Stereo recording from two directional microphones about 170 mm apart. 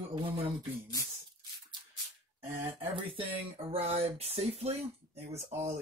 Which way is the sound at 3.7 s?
40° right (ahead or behind).